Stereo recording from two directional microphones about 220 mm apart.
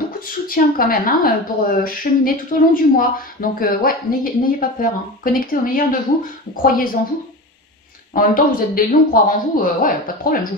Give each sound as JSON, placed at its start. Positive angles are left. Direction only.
{"t": 0.5, "sound": "a woman's voice", "side_deg": 40}
{"t": 8.1, "sound": "a woman's voice", "side_deg": 40}